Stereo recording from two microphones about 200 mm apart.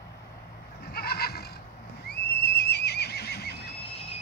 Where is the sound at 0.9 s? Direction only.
50° left (ahead or behind).